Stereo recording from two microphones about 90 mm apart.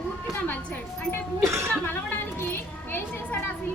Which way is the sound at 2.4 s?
25° left (ahead or behind).